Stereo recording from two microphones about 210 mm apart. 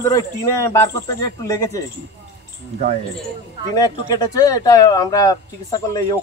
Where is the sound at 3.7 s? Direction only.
20° left (ahead or behind).